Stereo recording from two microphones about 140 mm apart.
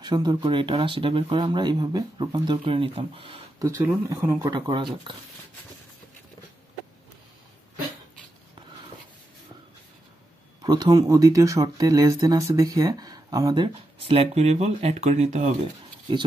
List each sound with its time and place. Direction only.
0.0 s speech: 30° right (ahead or behind)
3.5 s speech: 20° right (ahead or behind)
4.6 s speech: 35° right (ahead or behind)
10.6 s speech: 30° right (ahead or behind)
14.0 s speech: 45° right (ahead or behind)